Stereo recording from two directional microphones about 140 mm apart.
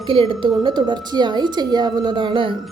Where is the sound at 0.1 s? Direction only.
35° right (ahead or behind).